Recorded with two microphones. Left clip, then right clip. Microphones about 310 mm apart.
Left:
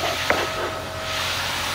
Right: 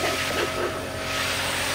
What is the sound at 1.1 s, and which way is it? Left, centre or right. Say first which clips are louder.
Vehicle: left 1 dB; centre.